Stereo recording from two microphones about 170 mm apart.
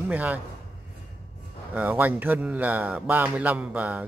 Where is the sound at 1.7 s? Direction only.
10° right (ahead or behind).